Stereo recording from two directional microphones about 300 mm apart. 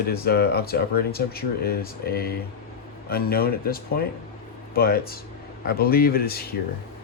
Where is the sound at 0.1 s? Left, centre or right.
Left.